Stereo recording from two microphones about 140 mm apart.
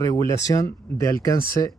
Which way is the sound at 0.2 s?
20° left (ahead or behind).